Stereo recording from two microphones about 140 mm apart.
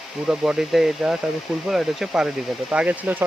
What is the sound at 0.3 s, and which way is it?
Speech, 5° right (ahead or behind).